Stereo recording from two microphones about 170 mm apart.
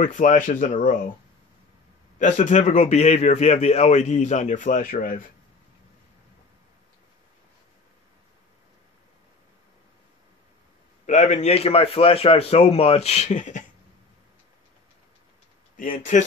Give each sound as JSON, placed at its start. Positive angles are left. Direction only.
{"t": 0.0, "sound": "a man's voice", "side_deg": 50}
{"t": 2.1, "sound": "a man's voice", "side_deg": 45}
{"t": 11.1, "sound": "a man's voice", "side_deg": 40}
{"t": 15.7, "sound": "speech", "side_deg": 55}